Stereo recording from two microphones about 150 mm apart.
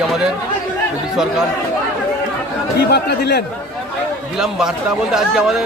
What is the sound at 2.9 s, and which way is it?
Speech, 90° left.